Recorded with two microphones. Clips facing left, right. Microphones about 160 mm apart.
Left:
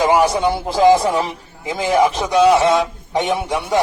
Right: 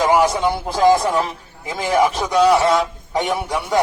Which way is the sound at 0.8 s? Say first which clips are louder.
Left 2 dB; 15° left (ahead or behind).